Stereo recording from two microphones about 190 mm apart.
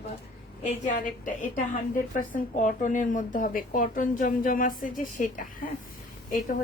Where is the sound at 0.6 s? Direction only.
45° left (ahead or behind).